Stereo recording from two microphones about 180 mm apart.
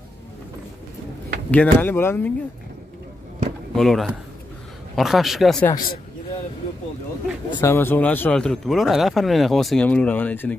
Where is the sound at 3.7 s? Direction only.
Centre (ahead or behind).